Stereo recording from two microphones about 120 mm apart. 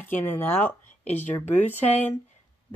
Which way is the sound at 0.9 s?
65° left (ahead or behind).